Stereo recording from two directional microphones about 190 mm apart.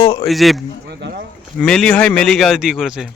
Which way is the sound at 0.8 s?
60° right (ahead or behind).